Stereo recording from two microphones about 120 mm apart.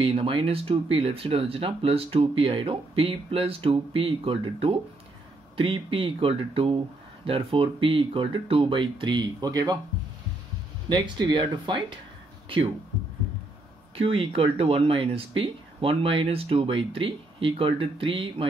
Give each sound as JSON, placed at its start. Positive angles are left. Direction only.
{"t": 0.0, "sound": "speech", "side_deg": -50}
{"t": 10.9, "sound": "speech", "side_deg": -40}
{"t": 13.9, "sound": "speech", "side_deg": -50}